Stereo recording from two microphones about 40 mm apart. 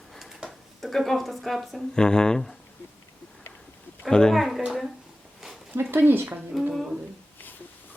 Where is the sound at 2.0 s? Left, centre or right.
Centre.